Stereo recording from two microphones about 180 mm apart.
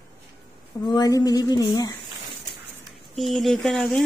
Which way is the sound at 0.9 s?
20° left (ahead or behind).